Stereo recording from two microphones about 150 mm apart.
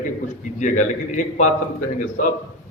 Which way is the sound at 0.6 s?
55° left (ahead or behind).